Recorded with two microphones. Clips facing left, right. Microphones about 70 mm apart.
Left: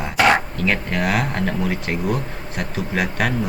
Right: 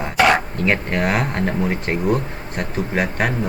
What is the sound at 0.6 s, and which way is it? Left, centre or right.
Speech, right.